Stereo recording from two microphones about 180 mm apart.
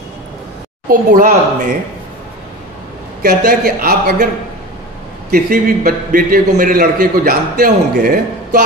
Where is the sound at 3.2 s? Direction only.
55° right (ahead or behind).